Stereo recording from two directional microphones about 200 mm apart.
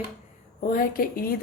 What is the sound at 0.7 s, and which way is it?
Speech, 45° left (ahead or behind).